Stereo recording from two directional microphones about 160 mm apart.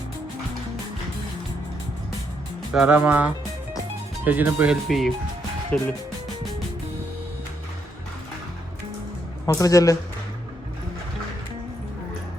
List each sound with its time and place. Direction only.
2.7 s speech: 5° right (ahead or behind); by 5.9 s 10° left (ahead or behind)
9.5 s speech: 20° left (ahead or behind)